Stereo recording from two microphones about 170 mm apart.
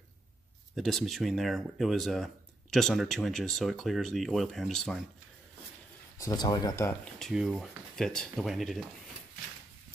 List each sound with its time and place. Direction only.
0.7 s speech: centre (ahead or behind)
6.1 s speech: 20° left (ahead or behind)
7.2 s speech: centre (ahead or behind)